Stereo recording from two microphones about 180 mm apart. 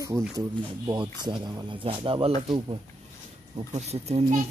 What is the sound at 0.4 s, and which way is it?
A child's voice, 25° right (ahead or behind).